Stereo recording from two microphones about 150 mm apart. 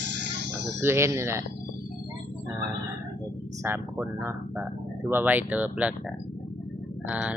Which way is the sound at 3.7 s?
15° right (ahead or behind).